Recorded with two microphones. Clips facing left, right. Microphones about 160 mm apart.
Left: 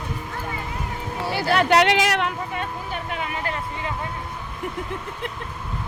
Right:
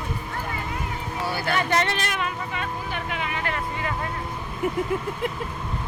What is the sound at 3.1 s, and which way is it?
Vehicle, 40° left (ahead or behind).